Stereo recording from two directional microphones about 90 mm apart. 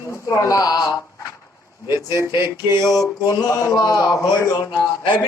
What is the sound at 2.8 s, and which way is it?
Speech, 45° left (ahead or behind).